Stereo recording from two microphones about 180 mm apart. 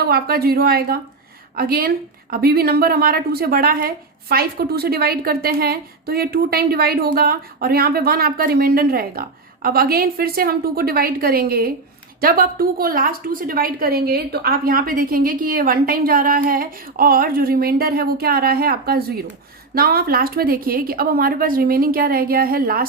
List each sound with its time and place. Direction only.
0.0 s a woman's voice: 60° right (ahead or behind)